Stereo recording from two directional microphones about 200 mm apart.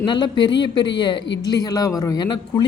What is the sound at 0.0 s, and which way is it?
A man's voice, 20° left (ahead or behind).